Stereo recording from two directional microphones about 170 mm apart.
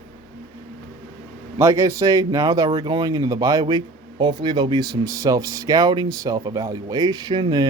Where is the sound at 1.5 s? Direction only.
15° right (ahead or behind).